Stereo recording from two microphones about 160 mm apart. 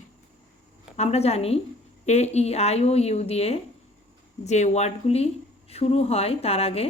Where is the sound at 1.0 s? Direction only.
40° left (ahead or behind).